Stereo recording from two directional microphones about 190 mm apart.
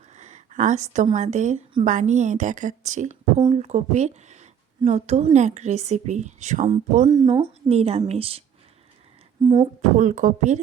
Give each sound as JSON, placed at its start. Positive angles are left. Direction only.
{"t": 0.1, "sound": "a sound", "side_deg": -40}
{"t": 1.1, "sound": "speech", "side_deg": -40}
{"t": 7.0, "sound": "speech", "side_deg": -25}
{"t": 10.0, "sound": "speech", "side_deg": -45}